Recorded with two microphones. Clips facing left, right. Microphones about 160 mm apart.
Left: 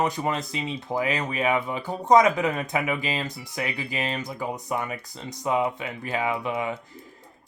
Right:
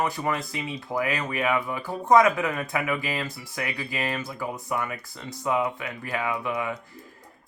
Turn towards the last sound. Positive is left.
turn(degrees=20)  # may be behind; listen again after turning